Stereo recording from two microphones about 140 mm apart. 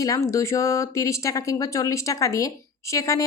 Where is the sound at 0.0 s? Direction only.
20° left (ahead or behind).